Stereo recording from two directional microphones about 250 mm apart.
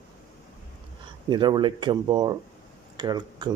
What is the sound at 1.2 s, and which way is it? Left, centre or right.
Speech, centre.